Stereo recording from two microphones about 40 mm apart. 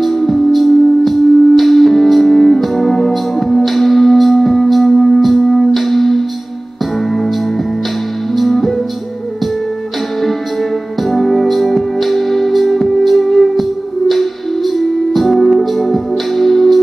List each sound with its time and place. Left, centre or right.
0.0 s music: centre
8.4 s music: centre
11.1 s music: centre